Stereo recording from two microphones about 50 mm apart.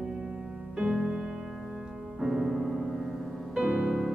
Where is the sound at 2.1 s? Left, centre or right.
Centre.